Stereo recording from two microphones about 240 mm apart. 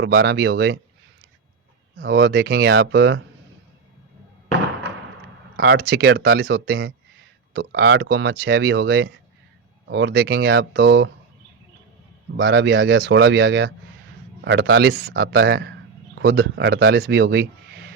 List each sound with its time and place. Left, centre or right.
0.0 s speech: right
2.0 s speech: right
5.5 s speech: right
12.4 s speech: right